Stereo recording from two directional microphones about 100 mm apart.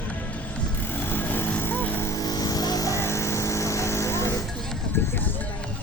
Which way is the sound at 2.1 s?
40° left (ahead or behind).